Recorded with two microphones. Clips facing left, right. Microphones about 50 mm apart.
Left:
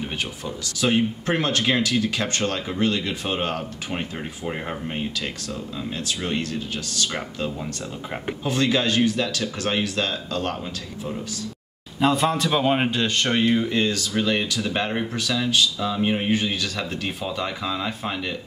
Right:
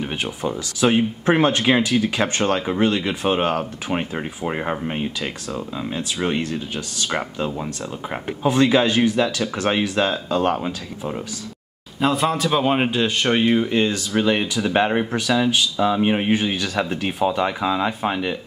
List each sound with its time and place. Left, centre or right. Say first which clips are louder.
0.7 s speech: right 3 dB; centre
12.0 s speech: right 1 dB; centre